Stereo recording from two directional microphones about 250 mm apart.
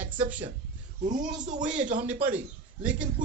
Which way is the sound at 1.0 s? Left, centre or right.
Right.